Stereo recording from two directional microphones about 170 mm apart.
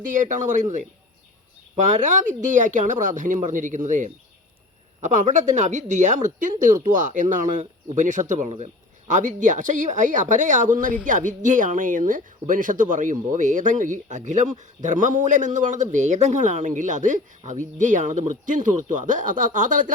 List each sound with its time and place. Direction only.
0.0 s speech: 50° right (ahead or behind)
1.7 s speech: 45° right (ahead or behind)